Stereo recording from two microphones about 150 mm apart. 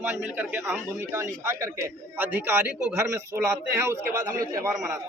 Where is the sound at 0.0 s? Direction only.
15° right (ahead or behind).